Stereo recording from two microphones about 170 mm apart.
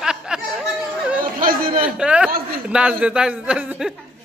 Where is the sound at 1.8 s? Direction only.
5° right (ahead or behind).